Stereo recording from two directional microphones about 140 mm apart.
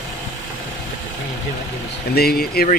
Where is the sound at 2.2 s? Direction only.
90° left.